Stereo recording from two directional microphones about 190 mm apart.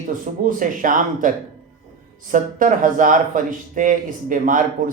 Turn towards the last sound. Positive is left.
turn(degrees=-45)  # may be behind; listen again after turning